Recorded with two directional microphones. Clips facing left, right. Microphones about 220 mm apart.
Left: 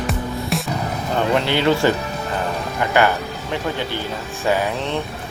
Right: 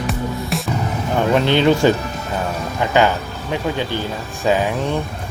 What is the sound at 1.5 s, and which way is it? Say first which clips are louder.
Speech: right 5 dB; 20° right (ahead or behind).